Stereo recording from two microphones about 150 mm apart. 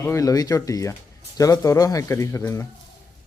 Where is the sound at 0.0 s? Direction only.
20° left (ahead or behind).